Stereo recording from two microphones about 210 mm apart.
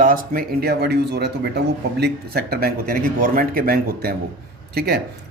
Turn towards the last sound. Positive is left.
turn(degrees=-50)  # may be behind; listen again after turning